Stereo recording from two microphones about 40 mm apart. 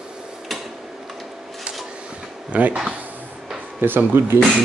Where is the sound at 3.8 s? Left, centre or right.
Right.